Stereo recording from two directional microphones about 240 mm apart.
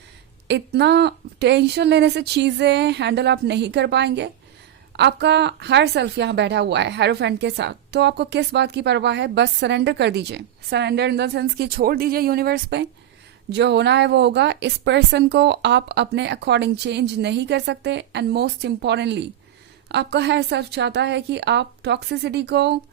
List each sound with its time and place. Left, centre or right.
0.4 s a woman's voice: right